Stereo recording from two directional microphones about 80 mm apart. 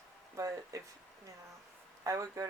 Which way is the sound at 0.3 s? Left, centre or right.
Right.